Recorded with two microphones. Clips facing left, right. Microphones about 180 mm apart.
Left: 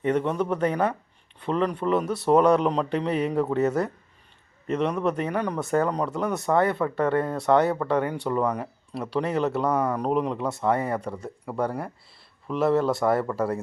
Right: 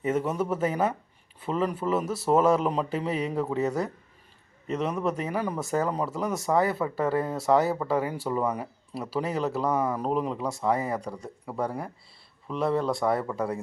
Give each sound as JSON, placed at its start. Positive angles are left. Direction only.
{"t": 0.0, "sound": "speech", "side_deg": -5}